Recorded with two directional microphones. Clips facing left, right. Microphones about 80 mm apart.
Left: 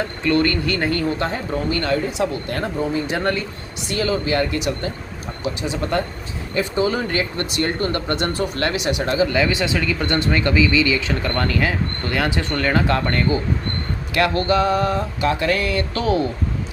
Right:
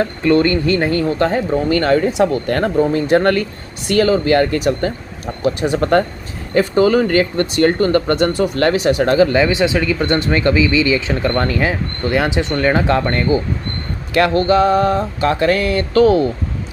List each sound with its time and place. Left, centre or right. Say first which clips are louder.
0.3 s speech: right 5 dB; right
1.2 s speech: right 7 dB; right
2.1 s speech: right 7 dB; right
4.0 s speech: right 6 dB; right
8.5 s a sound: right 7 dB; right
9.4 s speech: right 5 dB; right
14.1 s a sound: right 5 dB; right